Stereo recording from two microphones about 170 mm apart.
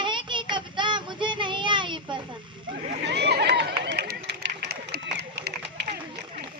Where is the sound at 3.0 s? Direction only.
80° right.